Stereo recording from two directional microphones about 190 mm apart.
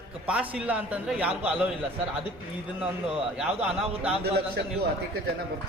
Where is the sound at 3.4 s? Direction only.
5° right (ahead or behind).